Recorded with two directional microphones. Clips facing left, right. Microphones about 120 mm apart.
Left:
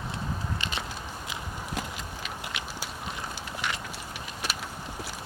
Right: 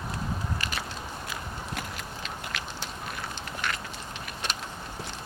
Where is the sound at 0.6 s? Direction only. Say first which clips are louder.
Even; 25° left (ahead or behind).